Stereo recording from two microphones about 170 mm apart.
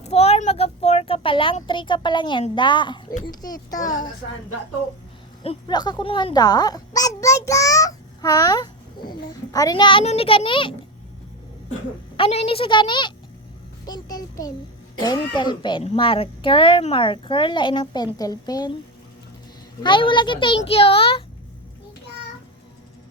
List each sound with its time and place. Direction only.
0.0 s a sound: 40° left (ahead or behind)
3.1 s a child's voice: 60° left (ahead or behind)
3.4 s a woman's voice: 20° left (ahead or behind)
5.4 s speech: 35° left (ahead or behind)
5.7 s a child's voice: 25° left (ahead or behind)
12.1 s a woman's voice: 35° left (ahead or behind)
19.8 s a woman's voice: 30° left (ahead or behind)